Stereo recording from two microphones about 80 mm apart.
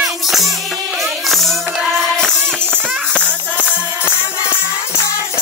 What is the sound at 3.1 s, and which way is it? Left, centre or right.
Music, centre.